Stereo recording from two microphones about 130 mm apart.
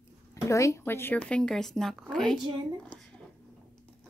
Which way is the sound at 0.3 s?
25° left (ahead or behind).